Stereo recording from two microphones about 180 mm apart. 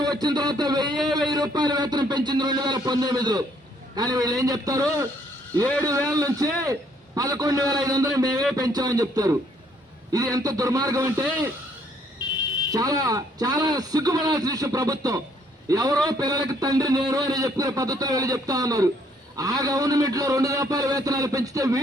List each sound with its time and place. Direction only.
0.0 s a man's voice: 20° right (ahead or behind)
6.1 s a man's voice: 20° right (ahead or behind)
12.7 s a man's voice: 20° right (ahead or behind)